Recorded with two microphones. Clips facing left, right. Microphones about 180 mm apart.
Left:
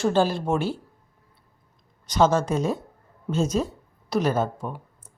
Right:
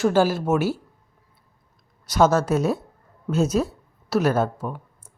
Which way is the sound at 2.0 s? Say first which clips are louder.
Right 2 dB; 10° right (ahead or behind).